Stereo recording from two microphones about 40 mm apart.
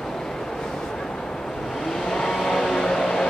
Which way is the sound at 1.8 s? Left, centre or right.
Centre.